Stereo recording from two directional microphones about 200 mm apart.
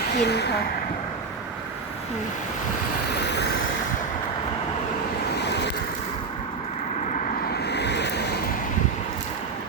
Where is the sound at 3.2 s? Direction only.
60° left (ahead or behind).